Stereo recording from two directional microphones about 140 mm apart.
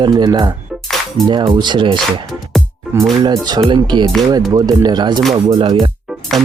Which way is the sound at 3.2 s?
30° right (ahead or behind).